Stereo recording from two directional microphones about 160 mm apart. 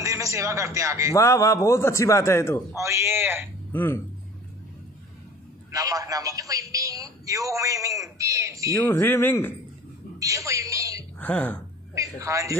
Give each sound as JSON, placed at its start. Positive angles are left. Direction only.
{"t": 0.0, "sound": "a man's voice", "side_deg": -20}
{"t": 1.1, "sound": "a man's voice", "side_deg": 20}
{"t": 2.8, "sound": "a man's voice", "side_deg": -15}
{"t": 3.7, "sound": "speech", "side_deg": 15}
{"t": 5.7, "sound": "a man's voice", "side_deg": -20}
{"t": 8.8, "sound": "speech", "side_deg": 15}
{"t": 10.1, "sound": "speech", "side_deg": -20}
{"t": 11.1, "sound": "speech", "side_deg": 10}
{"t": 11.9, "sound": "a man's voice", "side_deg": -20}